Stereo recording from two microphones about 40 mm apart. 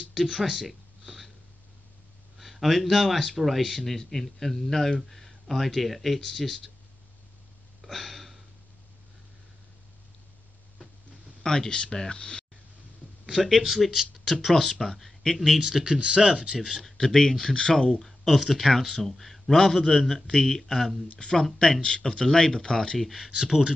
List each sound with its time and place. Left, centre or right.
0.1 s a sound: centre
2.3 s speech: centre
7.8 s a sound: centre
11.4 s speech: centre
13.2 s speech: centre
15.8 s speech: right
16.8 s speech: centre
19.5 s speech: centre
22.9 s speech: centre
23.2 s speech: centre